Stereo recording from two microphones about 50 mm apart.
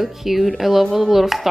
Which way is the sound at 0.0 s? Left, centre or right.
Centre.